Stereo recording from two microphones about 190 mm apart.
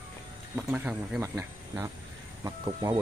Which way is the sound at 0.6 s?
10° right (ahead or behind).